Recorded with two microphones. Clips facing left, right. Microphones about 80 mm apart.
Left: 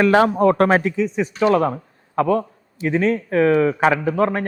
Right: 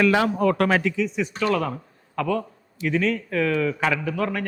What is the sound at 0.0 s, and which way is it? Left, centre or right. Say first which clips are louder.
A man's voice: left 5 dB; left.